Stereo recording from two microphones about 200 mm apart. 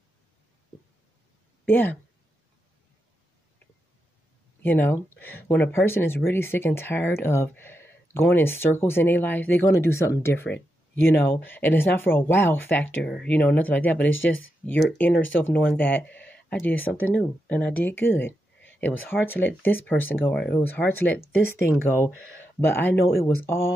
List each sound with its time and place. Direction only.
1.7 s speech: 10° left (ahead or behind)
4.6 s speech: 10° left (ahead or behind)
14.1 s speech: 75° left (ahead or behind)
14.6 s speech: 5° left (ahead or behind)